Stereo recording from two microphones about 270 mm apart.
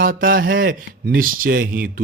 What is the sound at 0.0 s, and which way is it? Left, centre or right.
Speech, right.